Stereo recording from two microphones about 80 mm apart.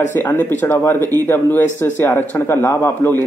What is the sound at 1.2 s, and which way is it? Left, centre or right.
A man's voice, left.